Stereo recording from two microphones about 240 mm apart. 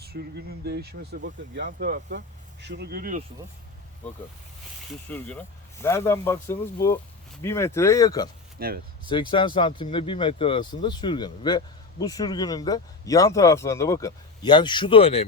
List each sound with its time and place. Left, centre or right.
0.0 s speech: right
5.0 s speech: centre
8.5 s speech: right
9.0 s speech: centre